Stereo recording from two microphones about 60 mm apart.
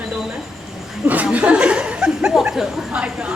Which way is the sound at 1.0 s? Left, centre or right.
Right.